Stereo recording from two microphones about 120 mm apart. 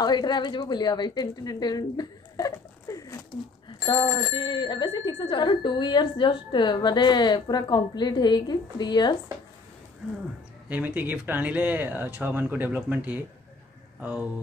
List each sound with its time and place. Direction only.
0.0 s speech: 35° left (ahead or behind)
3.6 s a woman's voice: 40° left (ahead or behind)
10.7 s speech: 15° right (ahead or behind)